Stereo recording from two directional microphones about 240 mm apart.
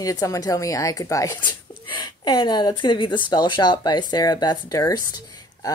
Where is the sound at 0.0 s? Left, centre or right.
Centre.